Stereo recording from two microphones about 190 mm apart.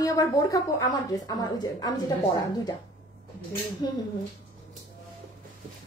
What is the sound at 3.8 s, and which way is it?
Speech, 20° left (ahead or behind).